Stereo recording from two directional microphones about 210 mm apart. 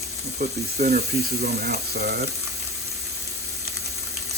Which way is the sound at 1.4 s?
50° right (ahead or behind).